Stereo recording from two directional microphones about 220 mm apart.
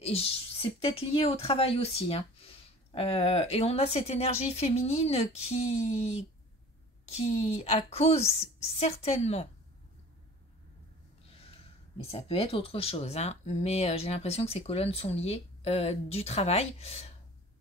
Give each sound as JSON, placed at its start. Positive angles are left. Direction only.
{"t": 0.0, "sound": "speech", "side_deg": 25}
{"t": 12.0, "sound": "speech", "side_deg": 25}